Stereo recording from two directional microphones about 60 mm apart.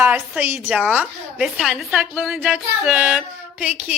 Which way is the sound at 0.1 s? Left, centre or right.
Right.